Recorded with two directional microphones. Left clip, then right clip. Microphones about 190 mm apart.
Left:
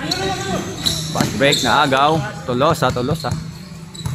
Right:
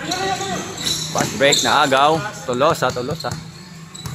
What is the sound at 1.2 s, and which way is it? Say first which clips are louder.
Speech: even; 5° right (ahead or behind).